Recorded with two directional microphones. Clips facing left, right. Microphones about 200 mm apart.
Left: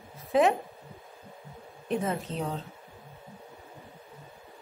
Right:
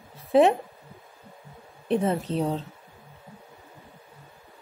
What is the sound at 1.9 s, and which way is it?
Speech, 30° right (ahead or behind).